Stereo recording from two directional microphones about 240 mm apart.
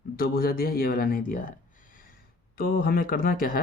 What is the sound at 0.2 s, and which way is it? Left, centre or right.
Speech, left.